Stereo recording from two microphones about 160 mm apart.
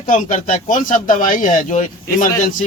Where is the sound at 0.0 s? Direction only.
55° left (ahead or behind).